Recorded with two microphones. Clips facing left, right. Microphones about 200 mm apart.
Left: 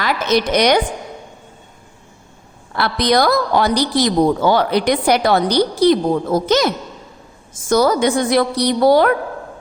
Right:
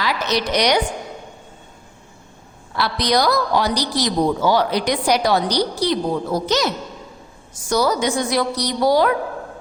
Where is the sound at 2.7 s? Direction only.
55° left (ahead or behind).